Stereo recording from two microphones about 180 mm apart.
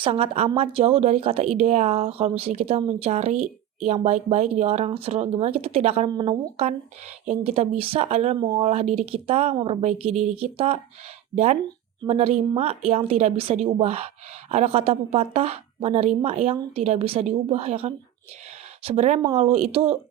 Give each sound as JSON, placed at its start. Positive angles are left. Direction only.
{"t": 0.0, "sound": "a woman's voice", "side_deg": -30}
{"t": 6.1, "sound": "a woman's voice", "side_deg": -25}
{"t": 12.0, "sound": "a woman's voice", "side_deg": -35}